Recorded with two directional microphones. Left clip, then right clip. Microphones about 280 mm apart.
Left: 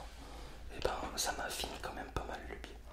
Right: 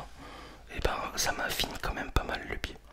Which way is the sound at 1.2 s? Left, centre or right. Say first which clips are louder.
Right 8 dB; right.